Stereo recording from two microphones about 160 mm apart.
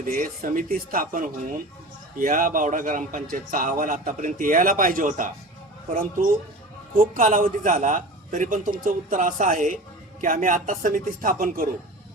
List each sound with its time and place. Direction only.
0.0 s a man's voice: 60° right (ahead or behind)